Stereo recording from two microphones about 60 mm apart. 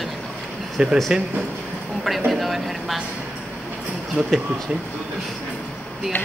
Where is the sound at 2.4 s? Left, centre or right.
Centre.